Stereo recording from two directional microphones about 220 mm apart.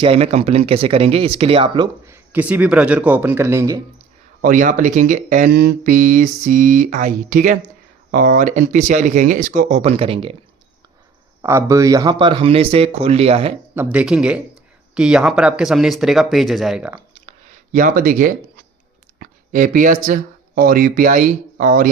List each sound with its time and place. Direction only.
0.0 s speech: 25° right (ahead or behind)
4.4 s speech: 35° right (ahead or behind)
5.5 s speech: 50° right (ahead or behind); by 10.3 s 25° right (ahead or behind)
11.4 s speech: 15° right (ahead or behind)
13.7 s speech: 5° right (ahead or behind)
17.7 s speech: 35° right (ahead or behind)